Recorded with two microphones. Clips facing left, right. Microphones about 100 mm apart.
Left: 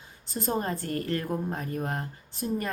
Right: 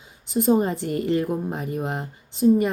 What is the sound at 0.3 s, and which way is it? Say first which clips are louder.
A woman's voice: right 9 dB; 15° right (ahead or behind).